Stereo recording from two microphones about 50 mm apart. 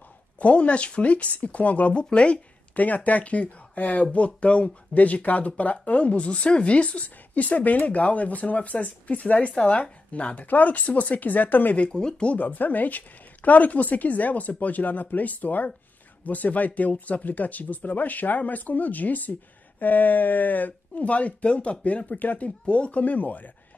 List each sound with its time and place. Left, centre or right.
0.4 s speech: left
11.8 s speech: centre
12.4 s speech: left